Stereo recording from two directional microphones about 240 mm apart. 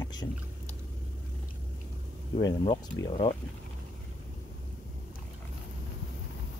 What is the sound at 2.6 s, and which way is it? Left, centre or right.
Speech, centre.